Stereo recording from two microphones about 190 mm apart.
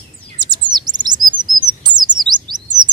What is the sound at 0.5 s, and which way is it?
Chirp, 20° right (ahead or behind).